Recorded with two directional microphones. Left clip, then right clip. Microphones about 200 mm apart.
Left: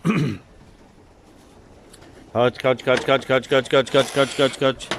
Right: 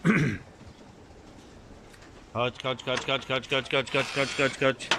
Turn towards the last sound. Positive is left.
turn(degrees=20)  # may be behind; listen again after turning